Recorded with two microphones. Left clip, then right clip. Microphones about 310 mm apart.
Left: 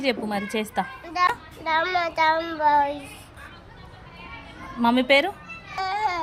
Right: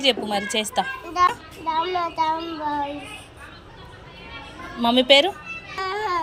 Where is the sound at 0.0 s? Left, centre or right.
Centre.